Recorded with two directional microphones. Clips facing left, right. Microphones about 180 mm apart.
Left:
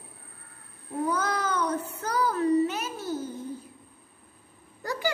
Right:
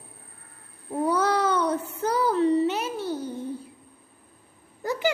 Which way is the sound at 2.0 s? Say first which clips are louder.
Right 5 dB; 30° right (ahead or behind).